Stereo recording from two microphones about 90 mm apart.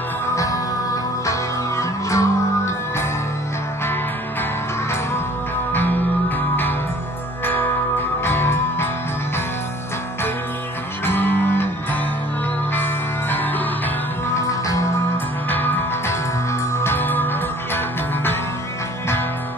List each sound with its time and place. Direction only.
1.2 s music: 35° left (ahead or behind)
5.7 s music: 20° left (ahead or behind)
8.2 s music: 25° left (ahead or behind)
11.1 s music: 20° left (ahead or behind)
14.3 s music: 35° left (ahead or behind)
15.5 s music: 20° left (ahead or behind)